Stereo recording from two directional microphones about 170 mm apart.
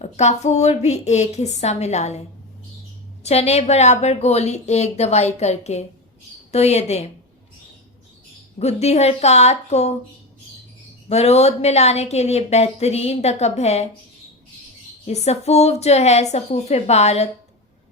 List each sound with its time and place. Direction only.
0.0 s a woman's voice: 40° left (ahead or behind)
3.2 s a woman's voice: 40° left (ahead or behind)
8.5 s a woman's voice: 40° left (ahead or behind)
11.1 s a woman's voice: 40° left (ahead or behind)
15.0 s a woman's voice: 40° left (ahead or behind)